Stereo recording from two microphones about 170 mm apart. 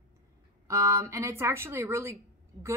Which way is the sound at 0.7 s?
15° right (ahead or behind).